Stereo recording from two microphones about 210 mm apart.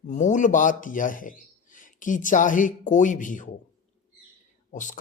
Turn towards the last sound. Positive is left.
turn(degrees=35)  # may be behind; listen again after turning